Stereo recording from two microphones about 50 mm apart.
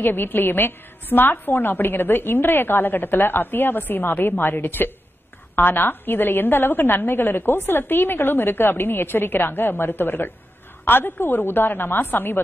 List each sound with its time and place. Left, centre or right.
0.0 s a woman's voice: left